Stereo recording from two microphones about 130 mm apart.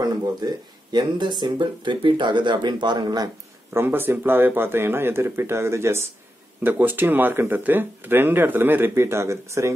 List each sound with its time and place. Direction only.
0.0 s speech: 30° right (ahead or behind)
3.7 s speech: 15° right (ahead or behind)